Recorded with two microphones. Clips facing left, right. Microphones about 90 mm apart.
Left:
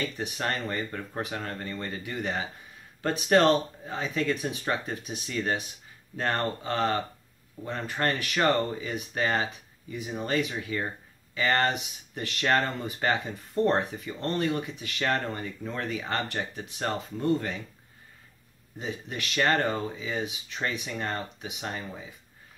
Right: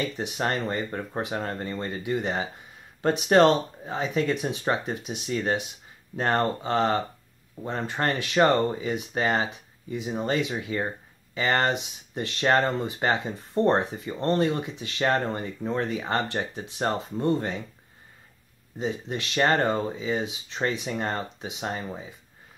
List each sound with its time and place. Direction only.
0.0 s speech: 20° right (ahead or behind)
18.8 s speech: 25° right (ahead or behind)